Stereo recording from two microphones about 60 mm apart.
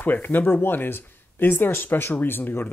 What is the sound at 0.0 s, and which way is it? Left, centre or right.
Speech, left.